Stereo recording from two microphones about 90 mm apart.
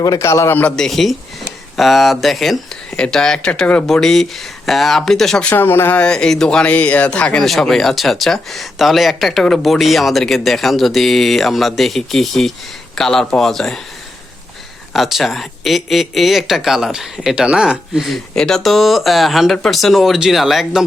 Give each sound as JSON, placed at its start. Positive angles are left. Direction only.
{"t": 0.0, "sound": "a man's voice", "side_deg": 35}
{"t": 0.8, "sound": "speech", "side_deg": 0}
{"t": 5.5, "sound": "speech", "side_deg": 25}
{"t": 14.9, "sound": "speech", "side_deg": 0}